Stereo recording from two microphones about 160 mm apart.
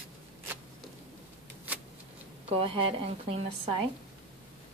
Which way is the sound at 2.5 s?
35° right (ahead or behind).